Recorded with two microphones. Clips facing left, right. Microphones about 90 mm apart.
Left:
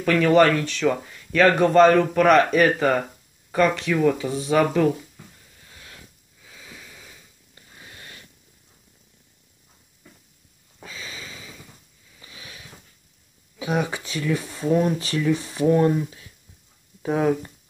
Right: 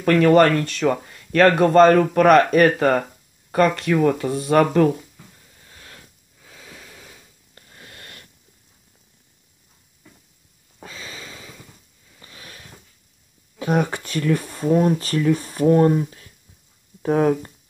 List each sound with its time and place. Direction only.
0.0 s speech: 50° right (ahead or behind)
1.1 s a sound: 55° right (ahead or behind)
1.6 s speech: 45° right (ahead or behind)
6.4 s wheeze: 40° right (ahead or behind)
7.7 s wheeze: 60° right (ahead or behind)
10.8 s a sound: 40° right (ahead or behind)
12.2 s sniff: 45° right (ahead or behind)
13.6 s speech: 45° right (ahead or behind)
14.7 s speech: 35° right (ahead or behind)